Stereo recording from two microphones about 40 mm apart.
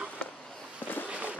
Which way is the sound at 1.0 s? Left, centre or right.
Right.